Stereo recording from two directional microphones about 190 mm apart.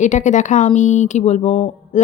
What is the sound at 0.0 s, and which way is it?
A woman's voice, 40° left (ahead or behind).